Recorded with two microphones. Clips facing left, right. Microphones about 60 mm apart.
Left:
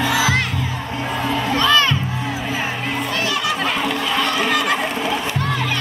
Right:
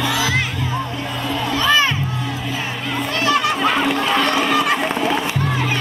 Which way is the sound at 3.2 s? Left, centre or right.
Right.